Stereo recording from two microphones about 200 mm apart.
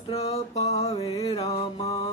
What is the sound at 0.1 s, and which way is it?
Music, 30° left (ahead or behind).